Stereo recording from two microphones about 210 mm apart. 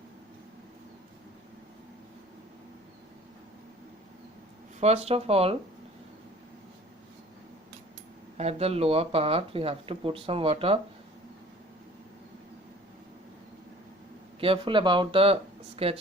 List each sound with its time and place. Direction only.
4.8 s speech: 30° right (ahead or behind)
8.4 s speech: 30° right (ahead or behind)
14.4 s speech: 25° right (ahead or behind)